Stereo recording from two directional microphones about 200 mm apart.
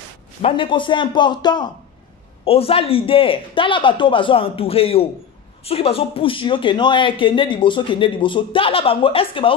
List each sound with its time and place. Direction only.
0.4 s a man's voice: 25° left (ahead or behind)